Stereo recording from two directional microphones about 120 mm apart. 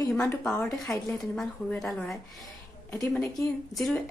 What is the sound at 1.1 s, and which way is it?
Speech, centre (ahead or behind).